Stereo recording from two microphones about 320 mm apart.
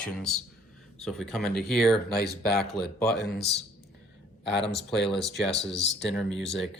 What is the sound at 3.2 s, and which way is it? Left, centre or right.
Speech, left.